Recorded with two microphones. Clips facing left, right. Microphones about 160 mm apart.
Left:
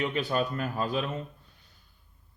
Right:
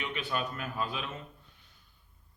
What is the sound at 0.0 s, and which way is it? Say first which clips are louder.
Speech: left 6 dB; 40° left (ahead or behind).